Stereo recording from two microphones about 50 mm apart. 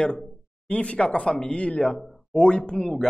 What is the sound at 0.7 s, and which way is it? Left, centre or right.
Speech, centre.